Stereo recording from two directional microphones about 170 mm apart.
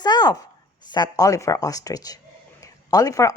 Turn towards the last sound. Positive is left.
turn(degrees=20)  # may be behind; listen again after turning